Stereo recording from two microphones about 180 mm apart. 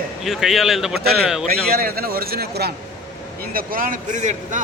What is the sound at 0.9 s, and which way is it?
A man's voice, 60° right (ahead or behind).